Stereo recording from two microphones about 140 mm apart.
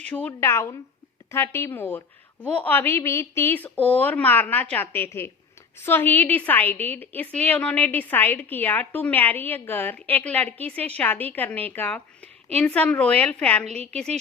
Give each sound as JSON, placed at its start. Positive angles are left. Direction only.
{"t": 0.0, "sound": "a woman's voice", "side_deg": 10}